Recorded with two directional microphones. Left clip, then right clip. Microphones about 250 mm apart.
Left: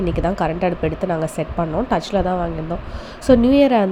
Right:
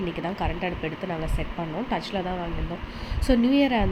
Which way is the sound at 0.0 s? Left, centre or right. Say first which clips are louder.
Left 9 dB; left.